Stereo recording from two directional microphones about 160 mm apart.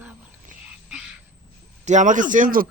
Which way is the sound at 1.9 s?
50° right (ahead or behind).